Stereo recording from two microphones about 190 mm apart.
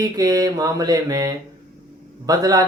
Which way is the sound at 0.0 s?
20° right (ahead or behind).